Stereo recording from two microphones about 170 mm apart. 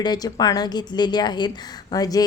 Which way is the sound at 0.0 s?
25° left (ahead or behind).